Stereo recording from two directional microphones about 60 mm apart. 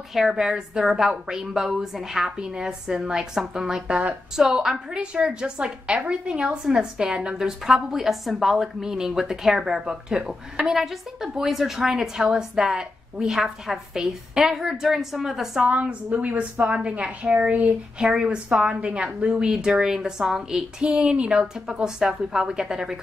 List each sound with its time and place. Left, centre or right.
0.1 s a woman's voice: centre
15.7 s a woman's voice: right
17.9 s a woman's voice: centre